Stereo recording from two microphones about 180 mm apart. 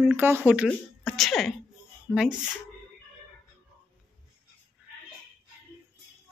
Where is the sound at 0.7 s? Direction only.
5° left (ahead or behind).